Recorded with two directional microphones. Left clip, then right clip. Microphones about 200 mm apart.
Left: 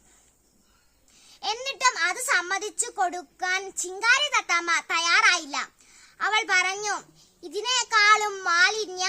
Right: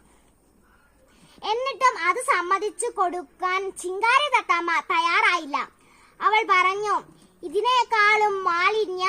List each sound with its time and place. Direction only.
1.4 s speech: 25° left (ahead or behind)